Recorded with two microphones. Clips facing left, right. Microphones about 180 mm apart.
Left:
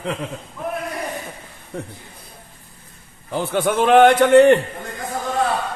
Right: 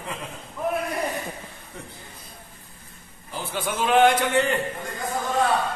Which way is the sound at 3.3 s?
60° left (ahead or behind).